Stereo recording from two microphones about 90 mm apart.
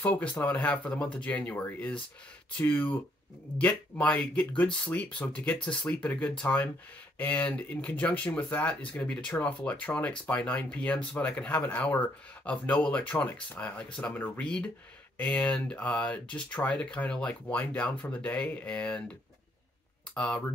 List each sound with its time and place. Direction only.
0.0 s speech: 15° left (ahead or behind)
20.2 s speech: 15° left (ahead or behind)